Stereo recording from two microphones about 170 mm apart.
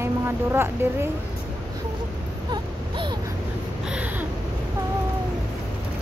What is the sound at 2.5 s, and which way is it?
Baby cry, 30° right (ahead or behind).